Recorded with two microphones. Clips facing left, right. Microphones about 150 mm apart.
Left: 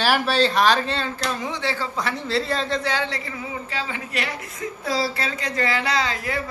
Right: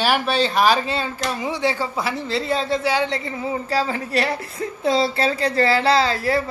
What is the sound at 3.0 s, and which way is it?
A woman's voice, 25° right (ahead or behind).